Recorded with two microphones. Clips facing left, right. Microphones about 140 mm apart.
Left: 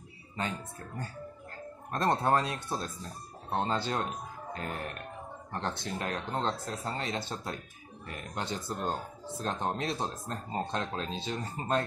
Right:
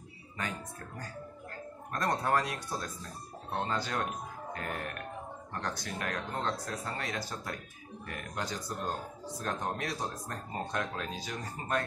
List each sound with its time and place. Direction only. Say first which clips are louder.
1.9 s speech: left 3 dB; 25° left (ahead or behind)